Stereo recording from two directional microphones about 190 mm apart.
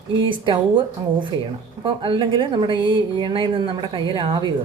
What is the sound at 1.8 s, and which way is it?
A woman's voice, 25° right (ahead or behind).